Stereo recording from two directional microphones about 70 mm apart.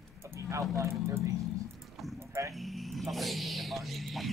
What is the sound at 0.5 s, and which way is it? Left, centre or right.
Speech, right.